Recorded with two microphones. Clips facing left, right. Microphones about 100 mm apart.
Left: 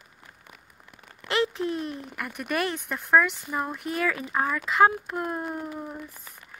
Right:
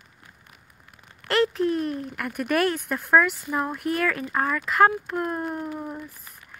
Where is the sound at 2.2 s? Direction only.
5° left (ahead or behind).